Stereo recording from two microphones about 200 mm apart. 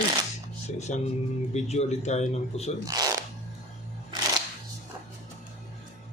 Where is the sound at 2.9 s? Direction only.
20° right (ahead or behind).